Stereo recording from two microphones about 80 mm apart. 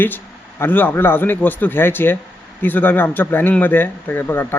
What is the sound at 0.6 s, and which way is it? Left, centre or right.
A man's voice, left.